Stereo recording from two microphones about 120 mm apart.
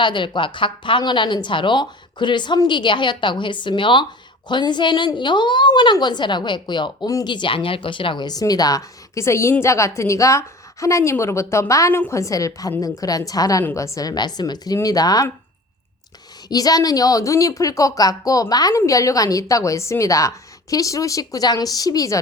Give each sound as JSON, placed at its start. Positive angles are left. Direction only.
{"t": 0.0, "sound": "a woman's voice", "side_deg": 40}
{"t": 16.5, "sound": "a woman's voice", "side_deg": 30}